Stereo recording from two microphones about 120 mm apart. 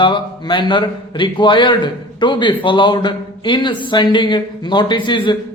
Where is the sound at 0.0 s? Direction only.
45° left (ahead or behind).